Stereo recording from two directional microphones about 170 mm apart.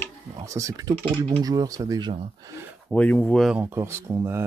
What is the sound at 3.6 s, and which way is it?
Speech, 15° right (ahead or behind).